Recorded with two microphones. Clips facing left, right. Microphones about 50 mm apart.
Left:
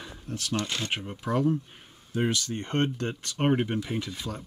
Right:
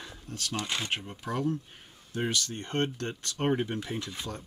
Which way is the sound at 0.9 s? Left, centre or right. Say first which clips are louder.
Left 4 dB; centre.